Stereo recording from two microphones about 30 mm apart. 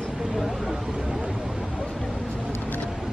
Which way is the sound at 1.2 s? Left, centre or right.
Right.